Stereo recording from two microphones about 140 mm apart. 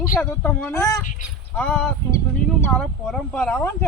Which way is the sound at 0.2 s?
15° left (ahead or behind).